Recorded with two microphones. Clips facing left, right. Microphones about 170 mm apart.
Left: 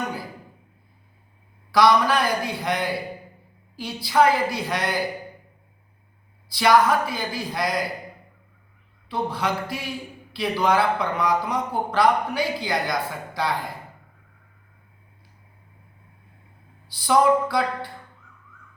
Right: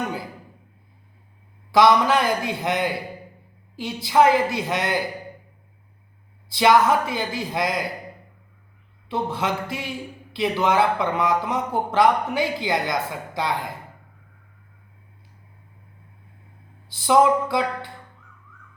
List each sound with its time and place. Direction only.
1.7 s speech: 20° right (ahead or behind)
6.5 s speech: 20° right (ahead or behind)
9.0 s speech: 20° right (ahead or behind)
17.0 s speech: 20° right (ahead or behind)